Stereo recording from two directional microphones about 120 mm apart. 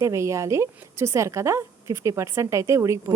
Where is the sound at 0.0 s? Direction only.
25° right (ahead or behind).